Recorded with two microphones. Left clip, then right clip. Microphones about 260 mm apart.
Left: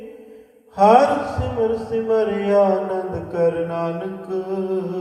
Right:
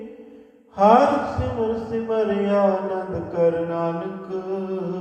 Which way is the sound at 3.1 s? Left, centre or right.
Left.